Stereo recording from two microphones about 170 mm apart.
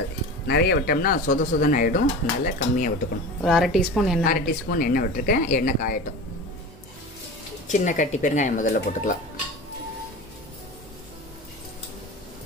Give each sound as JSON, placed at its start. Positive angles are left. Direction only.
{"t": 0.5, "sound": "speech", "side_deg": 75}
{"t": 3.4, "sound": "a woman's voice", "side_deg": 0}
{"t": 4.2, "sound": "speech", "side_deg": 55}
{"t": 7.7, "sound": "speech", "side_deg": 45}